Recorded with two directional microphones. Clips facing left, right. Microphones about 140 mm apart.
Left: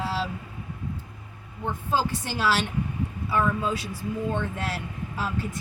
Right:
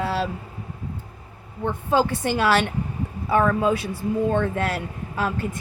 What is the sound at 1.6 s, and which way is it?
Speech, 65° right (ahead or behind).